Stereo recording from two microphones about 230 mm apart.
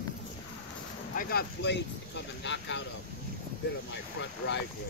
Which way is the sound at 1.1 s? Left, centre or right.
Left.